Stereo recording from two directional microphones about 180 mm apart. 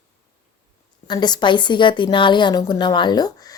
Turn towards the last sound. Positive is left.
turn(degrees=20)  # may be behind; listen again after turning